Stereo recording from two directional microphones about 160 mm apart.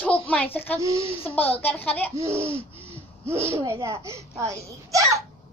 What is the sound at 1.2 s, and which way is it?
Speech, 10° left (ahead or behind).